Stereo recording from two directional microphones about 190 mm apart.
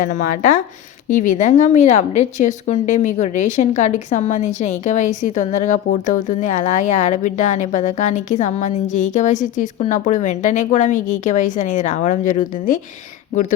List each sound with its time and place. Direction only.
0.0 s speech: 40° left (ahead or behind)